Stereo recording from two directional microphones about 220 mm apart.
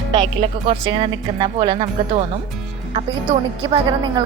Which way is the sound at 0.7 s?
25° right (ahead or behind).